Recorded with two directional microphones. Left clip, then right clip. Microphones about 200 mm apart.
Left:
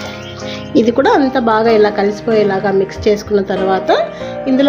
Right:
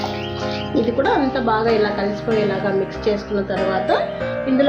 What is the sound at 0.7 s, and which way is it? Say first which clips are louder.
A woman's voice: left 8 dB; 50° left (ahead or behind).